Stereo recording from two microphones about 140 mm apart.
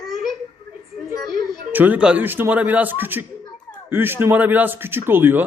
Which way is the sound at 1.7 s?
15° right (ahead or behind).